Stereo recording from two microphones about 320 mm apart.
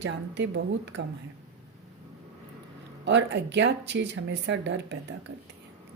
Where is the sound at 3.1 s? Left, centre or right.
Right.